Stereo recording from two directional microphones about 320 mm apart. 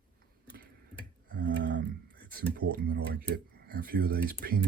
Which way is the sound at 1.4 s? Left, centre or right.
Right.